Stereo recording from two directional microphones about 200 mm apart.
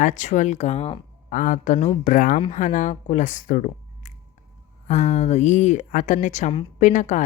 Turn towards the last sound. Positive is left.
turn(degrees=40)  # may be behind; listen again after turning